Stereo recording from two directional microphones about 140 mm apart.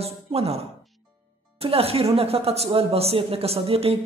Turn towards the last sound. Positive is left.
turn(degrees=-45)  # may be behind; listen again after turning